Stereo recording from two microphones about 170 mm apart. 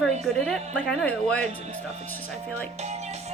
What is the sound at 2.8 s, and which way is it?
Music, 40° right (ahead or behind).